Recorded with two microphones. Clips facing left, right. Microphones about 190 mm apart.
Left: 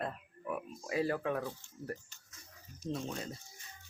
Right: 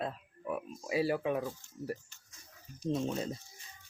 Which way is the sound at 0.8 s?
10° right (ahead or behind).